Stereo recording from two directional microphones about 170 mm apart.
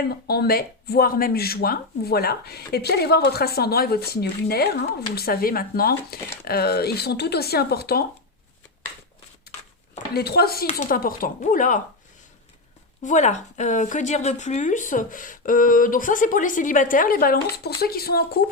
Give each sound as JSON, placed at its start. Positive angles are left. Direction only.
{"t": 0.1, "sound": "speech", "side_deg": 70}
{"t": 10.2, "sound": "speech", "side_deg": 65}
{"t": 10.7, "sound": "speech", "side_deg": 50}
{"t": 13.0, "sound": "speech", "side_deg": 45}